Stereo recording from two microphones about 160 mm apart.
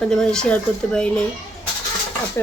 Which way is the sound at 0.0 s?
5° left (ahead or behind).